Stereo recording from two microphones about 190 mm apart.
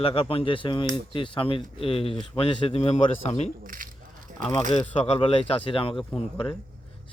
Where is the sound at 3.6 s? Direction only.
45° right (ahead or behind).